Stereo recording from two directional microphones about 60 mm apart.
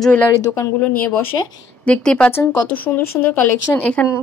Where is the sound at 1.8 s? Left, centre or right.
Centre.